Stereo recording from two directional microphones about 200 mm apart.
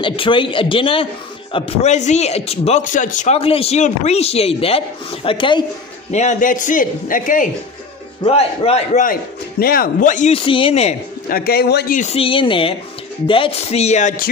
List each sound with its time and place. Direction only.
0.0 s a man's voice: 25° left (ahead or behind)
6.1 s a man's voice: 40° left (ahead or behind)
8.2 s a man's voice: 30° left (ahead or behind)
11.2 s a man's voice: 50° left (ahead or behind)
12.0 s a man's voice: 30° left (ahead or behind)